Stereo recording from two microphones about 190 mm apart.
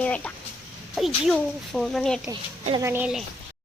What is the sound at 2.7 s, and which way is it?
Speech, 15° right (ahead or behind).